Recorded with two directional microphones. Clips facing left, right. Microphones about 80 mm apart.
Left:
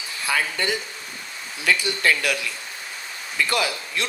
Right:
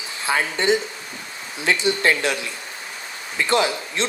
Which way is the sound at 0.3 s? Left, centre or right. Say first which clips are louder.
Right 5 dB; right.